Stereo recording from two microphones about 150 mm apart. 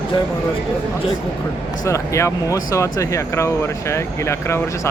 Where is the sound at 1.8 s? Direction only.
20° left (ahead or behind).